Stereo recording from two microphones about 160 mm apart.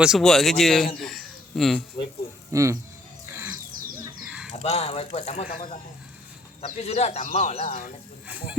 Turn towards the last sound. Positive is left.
turn(degrees=50)  # may be behind; listen again after turning